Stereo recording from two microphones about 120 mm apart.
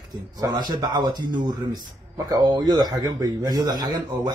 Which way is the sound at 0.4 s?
35° right (ahead or behind).